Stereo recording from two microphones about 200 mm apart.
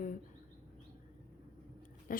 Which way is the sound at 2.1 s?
45° left (ahead or behind).